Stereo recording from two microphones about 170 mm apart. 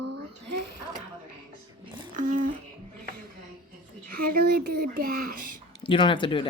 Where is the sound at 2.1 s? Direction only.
50° right (ahead or behind).